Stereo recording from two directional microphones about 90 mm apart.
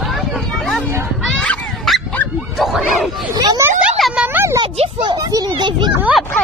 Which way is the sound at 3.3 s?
45° right (ahead or behind).